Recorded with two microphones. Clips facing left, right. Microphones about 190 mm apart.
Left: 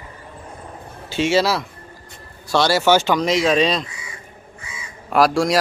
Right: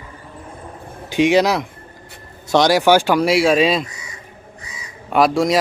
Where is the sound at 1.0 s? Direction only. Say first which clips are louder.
Right 4 dB; 15° right (ahead or behind).